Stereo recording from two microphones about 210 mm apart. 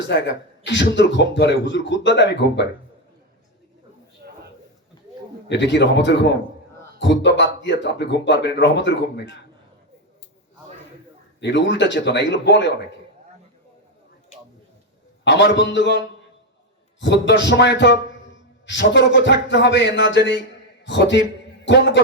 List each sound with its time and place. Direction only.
0.1 s speech: 60° left (ahead or behind)
5.5 s speech: 60° left (ahead or behind)
11.3 s speech: 55° left (ahead or behind)
15.2 s a man's voice: 55° left (ahead or behind)